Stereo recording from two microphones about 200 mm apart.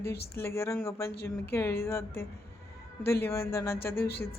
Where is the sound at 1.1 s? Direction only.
50° left (ahead or behind).